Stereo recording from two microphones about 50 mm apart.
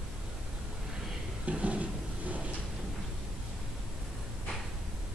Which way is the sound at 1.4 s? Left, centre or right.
Right.